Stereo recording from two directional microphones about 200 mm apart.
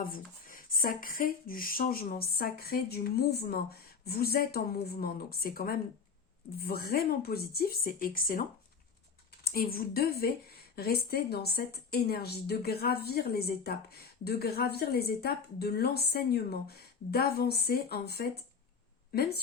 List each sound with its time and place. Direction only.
0.0 s a woman's voice: 45° left (ahead or behind)